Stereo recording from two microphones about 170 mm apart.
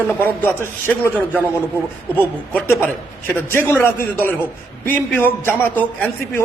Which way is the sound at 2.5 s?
10° left (ahead or behind).